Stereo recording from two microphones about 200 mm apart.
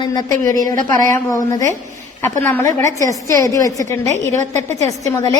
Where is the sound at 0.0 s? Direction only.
20° left (ahead or behind).